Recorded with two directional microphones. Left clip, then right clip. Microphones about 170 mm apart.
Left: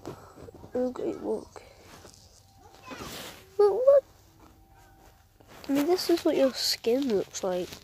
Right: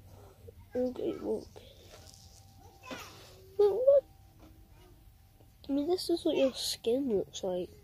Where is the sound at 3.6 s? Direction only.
25° left (ahead or behind).